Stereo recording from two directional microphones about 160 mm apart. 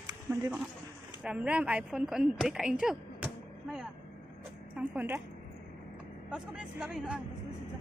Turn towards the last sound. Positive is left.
turn(degrees=-5)  # may be behind; listen again after turning